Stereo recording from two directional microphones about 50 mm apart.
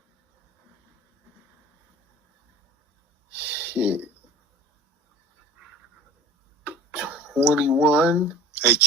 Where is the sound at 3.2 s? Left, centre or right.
Right.